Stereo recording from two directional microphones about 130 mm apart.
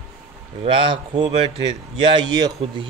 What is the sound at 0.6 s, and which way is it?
A man's voice, 45° right (ahead or behind).